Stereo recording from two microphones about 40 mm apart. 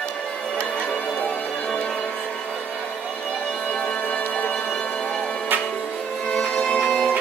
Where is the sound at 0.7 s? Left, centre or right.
Left.